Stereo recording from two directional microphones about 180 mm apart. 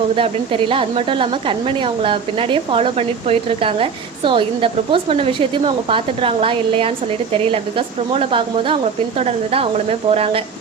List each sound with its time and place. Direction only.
0.2 s a woman's voice: 30° right (ahead or behind)